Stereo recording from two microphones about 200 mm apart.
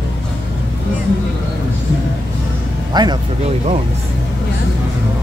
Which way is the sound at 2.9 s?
20° right (ahead or behind).